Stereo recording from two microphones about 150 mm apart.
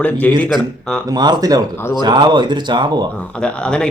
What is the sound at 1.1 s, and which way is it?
Speech, 30° right (ahead or behind).